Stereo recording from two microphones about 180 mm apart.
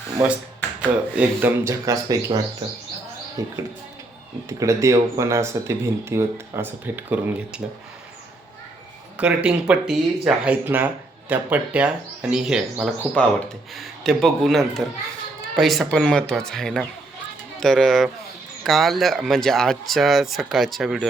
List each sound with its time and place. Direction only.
0.8 s speech: 10° right (ahead or behind)
9.1 s speech: 5° right (ahead or behind)